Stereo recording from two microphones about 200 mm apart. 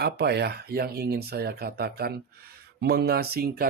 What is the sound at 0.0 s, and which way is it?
Speech, 55° right (ahead or behind).